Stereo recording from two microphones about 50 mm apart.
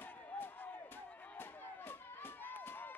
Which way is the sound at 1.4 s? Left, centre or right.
Left.